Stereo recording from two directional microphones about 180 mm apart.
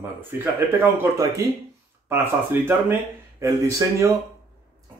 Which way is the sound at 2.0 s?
10° right (ahead or behind).